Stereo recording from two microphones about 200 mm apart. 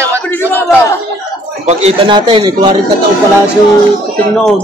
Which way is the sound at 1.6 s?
35° right (ahead or behind).